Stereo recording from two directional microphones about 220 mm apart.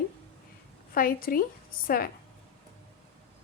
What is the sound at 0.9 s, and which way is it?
Speech, 40° left (ahead or behind).